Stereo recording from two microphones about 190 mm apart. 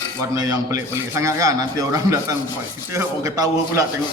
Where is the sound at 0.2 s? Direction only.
20° right (ahead or behind).